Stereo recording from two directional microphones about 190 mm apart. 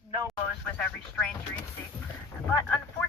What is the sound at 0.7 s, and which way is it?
Speech, 10° left (ahead or behind).